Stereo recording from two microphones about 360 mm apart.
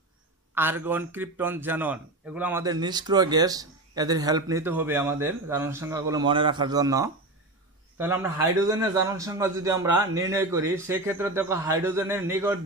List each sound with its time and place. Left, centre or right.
0.6 s a man's voice: centre